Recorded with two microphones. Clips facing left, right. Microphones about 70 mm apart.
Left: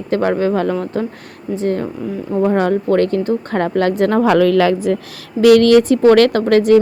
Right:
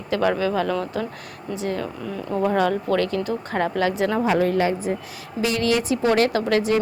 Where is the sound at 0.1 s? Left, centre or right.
Left.